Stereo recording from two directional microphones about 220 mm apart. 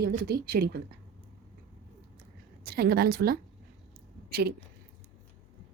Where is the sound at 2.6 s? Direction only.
45° right (ahead or behind).